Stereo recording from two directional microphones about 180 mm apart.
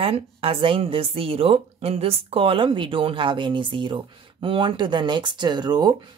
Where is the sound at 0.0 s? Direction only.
30° right (ahead or behind).